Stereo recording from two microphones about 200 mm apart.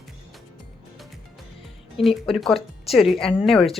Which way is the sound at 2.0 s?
Centre (ahead or behind).